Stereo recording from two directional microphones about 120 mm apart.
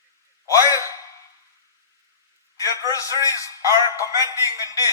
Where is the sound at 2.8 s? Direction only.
30° left (ahead or behind).